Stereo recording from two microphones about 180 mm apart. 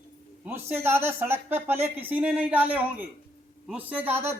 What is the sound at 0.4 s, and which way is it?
Speech, 10° right (ahead or behind).